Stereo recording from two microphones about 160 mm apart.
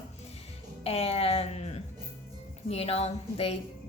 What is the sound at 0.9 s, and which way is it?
Speech, 40° left (ahead or behind).